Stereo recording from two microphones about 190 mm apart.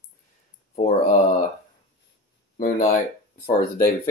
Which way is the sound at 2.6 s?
45° left (ahead or behind).